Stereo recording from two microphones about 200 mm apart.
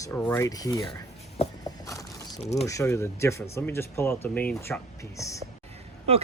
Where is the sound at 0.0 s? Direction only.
10° left (ahead or behind).